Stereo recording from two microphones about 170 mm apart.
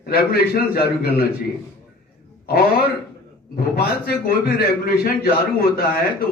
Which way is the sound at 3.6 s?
60° left (ahead or behind).